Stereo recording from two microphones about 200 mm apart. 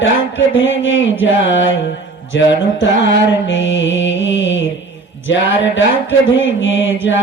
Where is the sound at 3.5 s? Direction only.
70° left (ahead or behind).